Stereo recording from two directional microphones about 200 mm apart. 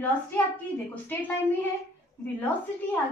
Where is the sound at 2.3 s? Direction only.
10° left (ahead or behind).